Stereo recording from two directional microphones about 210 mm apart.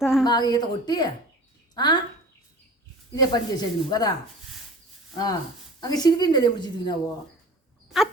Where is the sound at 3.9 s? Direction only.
20° left (ahead or behind).